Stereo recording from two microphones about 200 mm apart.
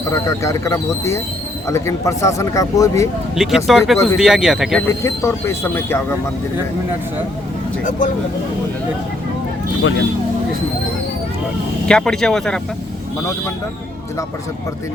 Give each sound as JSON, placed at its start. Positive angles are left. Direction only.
{"t": 0.1, "sound": "speech", "side_deg": 15}
{"t": 3.3, "sound": "speech", "side_deg": 0}
{"t": 4.9, "sound": "speech", "side_deg": 15}
{"t": 7.9, "sound": "speech", "side_deg": 40}
{"t": 11.9, "sound": "speech", "side_deg": 5}